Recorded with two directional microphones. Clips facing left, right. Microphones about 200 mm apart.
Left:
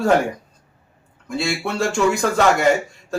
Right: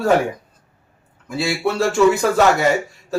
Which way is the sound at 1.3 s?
5° right (ahead or behind).